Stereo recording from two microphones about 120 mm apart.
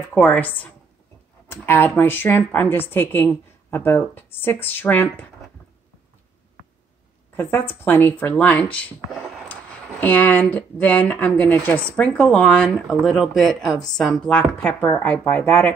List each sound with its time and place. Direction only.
0.1 s speech: 10° left (ahead or behind)
7.3 s speech: 15° left (ahead or behind)